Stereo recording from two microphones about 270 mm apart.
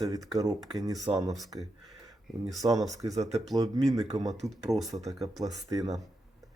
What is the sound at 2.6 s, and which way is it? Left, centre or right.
A man's voice, centre.